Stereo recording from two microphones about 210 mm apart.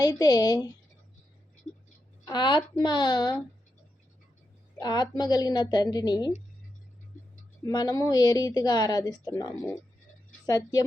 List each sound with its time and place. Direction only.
0.0 s a woman's voice: 20° left (ahead or behind)
2.2 s a woman's voice: 20° left (ahead or behind)
4.8 s a woman's voice: 20° left (ahead or behind)
7.6 s a woman's voice: 20° left (ahead or behind)